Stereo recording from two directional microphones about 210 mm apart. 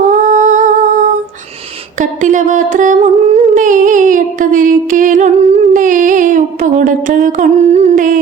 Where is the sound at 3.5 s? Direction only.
40° right (ahead or behind).